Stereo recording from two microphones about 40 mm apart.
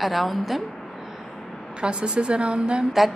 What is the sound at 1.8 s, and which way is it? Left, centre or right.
A woman's voice, right.